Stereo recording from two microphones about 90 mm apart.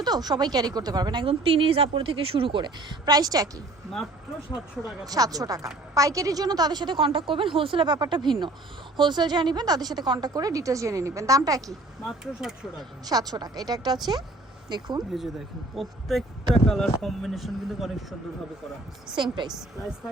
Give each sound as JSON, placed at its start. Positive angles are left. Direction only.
{"t": 0.0, "sound": "a woman's voice", "side_deg": -50}
{"t": 1.2, "sound": "speech", "side_deg": -90}
{"t": 5.0, "sound": "a woman's voice", "side_deg": -45}
{"t": 7.9, "sound": "a woman's voice", "side_deg": -55}
{"t": 11.7, "sound": "speech", "side_deg": -5}
{"t": 13.1, "sound": "a woman's voice", "side_deg": -45}
{"t": 15.1, "sound": "speech", "side_deg": 0}
{"t": 19.2, "sound": "a woman's voice", "side_deg": -60}